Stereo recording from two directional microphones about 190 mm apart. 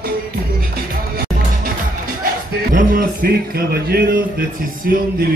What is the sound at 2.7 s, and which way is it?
Speech, 45° right (ahead or behind).